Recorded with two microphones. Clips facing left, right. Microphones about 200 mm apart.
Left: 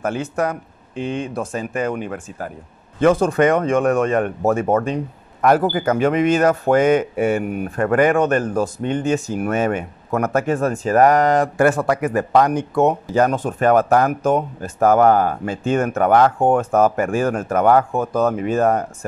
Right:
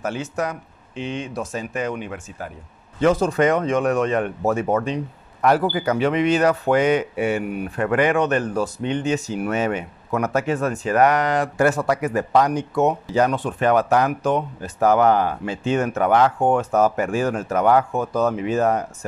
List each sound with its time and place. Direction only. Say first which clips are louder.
0.0 s speech: left 4 dB; 55° left (ahead or behind)